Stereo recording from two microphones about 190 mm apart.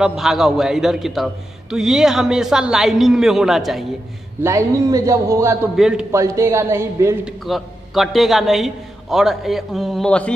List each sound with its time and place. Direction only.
0.0 s a man's voice: centre (ahead or behind)
4.4 s a man's voice: 15° right (ahead or behind)
5.8 s a man's voice: 5° right (ahead or behind)
6.1 s a man's voice: 15° right (ahead or behind)
7.4 s a man's voice: centre (ahead or behind)